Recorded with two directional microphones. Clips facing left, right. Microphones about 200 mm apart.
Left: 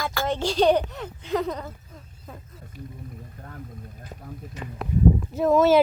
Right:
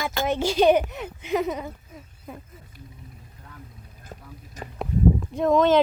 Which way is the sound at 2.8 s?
55° left (ahead or behind).